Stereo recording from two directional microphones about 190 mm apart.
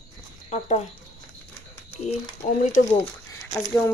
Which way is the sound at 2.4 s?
40° left (ahead or behind).